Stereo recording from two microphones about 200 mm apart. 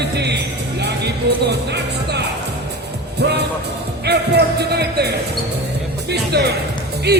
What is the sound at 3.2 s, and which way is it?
Speech, 55° right (ahead or behind).